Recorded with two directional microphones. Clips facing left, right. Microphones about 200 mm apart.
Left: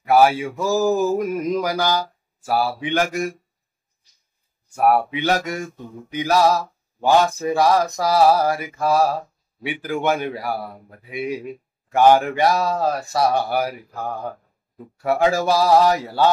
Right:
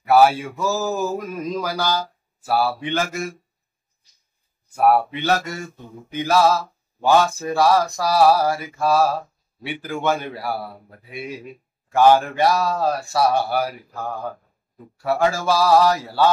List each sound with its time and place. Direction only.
0.1 s speech: 15° left (ahead or behind)
4.7 s speech: 10° left (ahead or behind)
15.0 s speech: 15° left (ahead or behind)